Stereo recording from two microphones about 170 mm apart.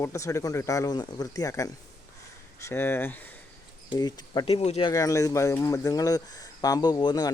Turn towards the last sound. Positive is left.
turn(degrees=25)  # may be behind; listen again after turning